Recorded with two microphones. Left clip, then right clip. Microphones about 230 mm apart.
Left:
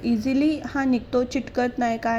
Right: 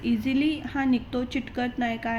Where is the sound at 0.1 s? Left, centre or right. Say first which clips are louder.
Left 3 dB; centre.